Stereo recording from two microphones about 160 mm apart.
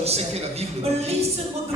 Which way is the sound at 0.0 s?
40° right (ahead or behind).